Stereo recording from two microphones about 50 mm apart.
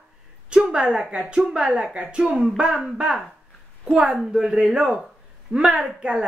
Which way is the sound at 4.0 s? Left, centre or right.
Centre.